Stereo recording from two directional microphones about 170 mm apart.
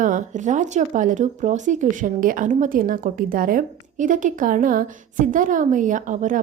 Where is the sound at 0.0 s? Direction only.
50° right (ahead or behind).